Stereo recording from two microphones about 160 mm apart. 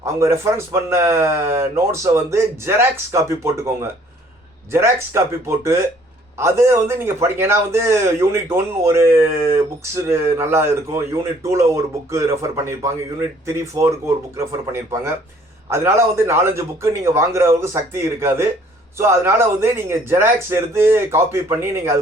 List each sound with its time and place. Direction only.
0.0 s speech: 15° right (ahead or behind)
4.7 s speech: 15° right (ahead or behind)